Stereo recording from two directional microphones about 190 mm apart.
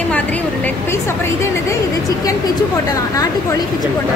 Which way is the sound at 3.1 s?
20° left (ahead or behind).